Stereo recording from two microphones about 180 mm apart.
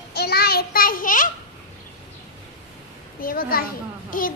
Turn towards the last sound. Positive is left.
turn(degrees=50)  # may be behind; listen again after turning